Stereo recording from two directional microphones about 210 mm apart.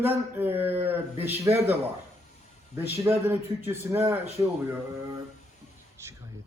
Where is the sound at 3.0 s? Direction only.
10° right (ahead or behind).